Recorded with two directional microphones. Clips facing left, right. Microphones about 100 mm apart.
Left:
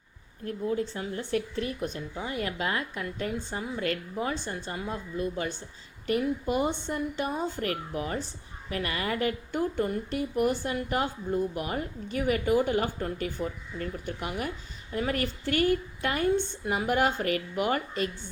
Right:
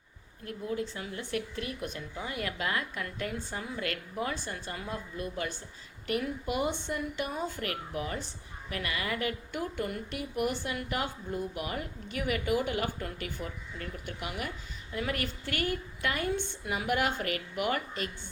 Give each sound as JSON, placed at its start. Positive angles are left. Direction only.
{"t": 0.4, "sound": "a woman's voice", "side_deg": 30}